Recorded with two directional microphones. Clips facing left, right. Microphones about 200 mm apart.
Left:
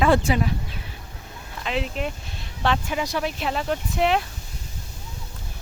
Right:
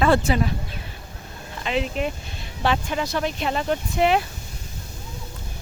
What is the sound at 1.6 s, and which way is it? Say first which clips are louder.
Speech: right 3 dB; centre (ahead or behind).